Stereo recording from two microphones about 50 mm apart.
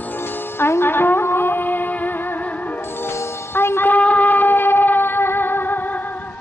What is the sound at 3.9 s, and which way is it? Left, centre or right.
Music, left.